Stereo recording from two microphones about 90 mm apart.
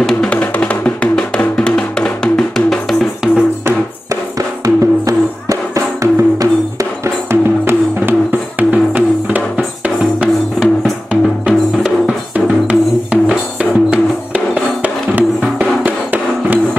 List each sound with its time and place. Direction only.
0.0 s music: 10° left (ahead or behind)
3.6 s music: 35° right (ahead or behind); by 16.5 s 20° right (ahead or behind)